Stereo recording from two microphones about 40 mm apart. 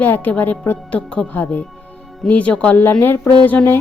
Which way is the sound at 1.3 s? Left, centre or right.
Left.